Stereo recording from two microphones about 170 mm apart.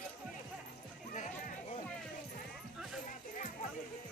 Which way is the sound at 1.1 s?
45° left (ahead or behind).